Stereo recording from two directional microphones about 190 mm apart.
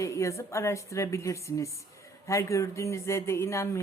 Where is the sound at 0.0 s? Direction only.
15° left (ahead or behind).